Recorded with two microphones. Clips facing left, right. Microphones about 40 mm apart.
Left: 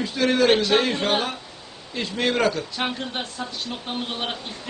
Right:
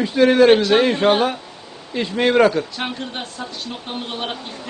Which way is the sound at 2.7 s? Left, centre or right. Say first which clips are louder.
Right 1 dB; centre.